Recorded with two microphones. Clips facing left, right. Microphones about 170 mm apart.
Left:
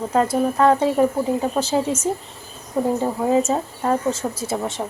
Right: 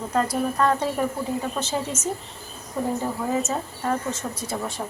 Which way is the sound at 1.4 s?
30° left (ahead or behind).